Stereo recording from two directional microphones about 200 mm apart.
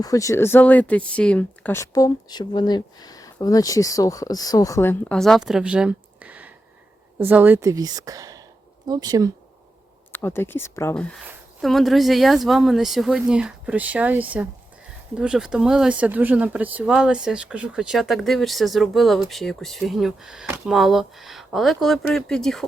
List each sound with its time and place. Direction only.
0.0 s speech: 15° left (ahead or behind); by 9.3 s 20° right (ahead or behind)
10.1 s speech: 10° left (ahead or behind)